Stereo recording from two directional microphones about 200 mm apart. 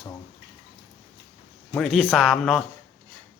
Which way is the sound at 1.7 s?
Centre (ahead or behind).